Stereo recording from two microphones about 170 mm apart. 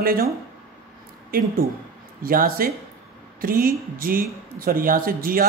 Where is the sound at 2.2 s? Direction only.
55° right (ahead or behind).